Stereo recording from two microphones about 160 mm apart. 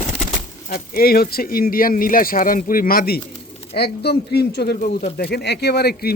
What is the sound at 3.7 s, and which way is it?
Speech, 90° left.